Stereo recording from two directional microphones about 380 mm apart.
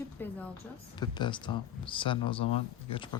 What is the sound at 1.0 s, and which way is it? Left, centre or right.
Speech, centre.